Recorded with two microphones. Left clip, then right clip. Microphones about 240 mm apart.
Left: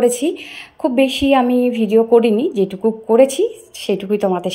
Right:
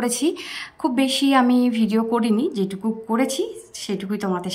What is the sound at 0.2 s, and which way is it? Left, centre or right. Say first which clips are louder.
Speech: left 3 dB; right.